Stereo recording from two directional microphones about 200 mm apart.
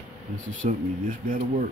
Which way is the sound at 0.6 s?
40° right (ahead or behind).